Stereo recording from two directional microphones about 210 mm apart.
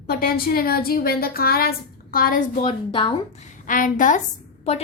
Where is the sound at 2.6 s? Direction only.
25° left (ahead or behind).